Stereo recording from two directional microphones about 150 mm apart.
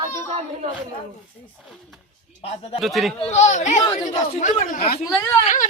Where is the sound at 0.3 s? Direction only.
45° right (ahead or behind).